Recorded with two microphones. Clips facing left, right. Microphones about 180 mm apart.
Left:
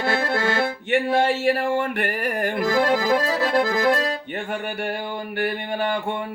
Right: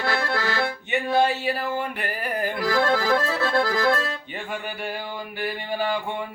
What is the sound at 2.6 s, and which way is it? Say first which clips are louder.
Accordion: left 2 dB; 15° left (ahead or behind).